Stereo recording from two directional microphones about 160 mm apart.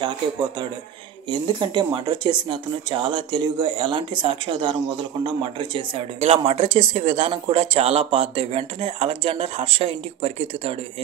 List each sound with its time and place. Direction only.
1.3 s speech: 30° right (ahead or behind)